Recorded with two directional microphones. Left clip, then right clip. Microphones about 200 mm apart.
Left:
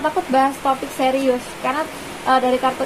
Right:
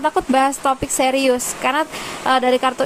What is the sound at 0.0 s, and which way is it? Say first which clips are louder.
Speech: right 1 dB; 35° right (ahead or behind).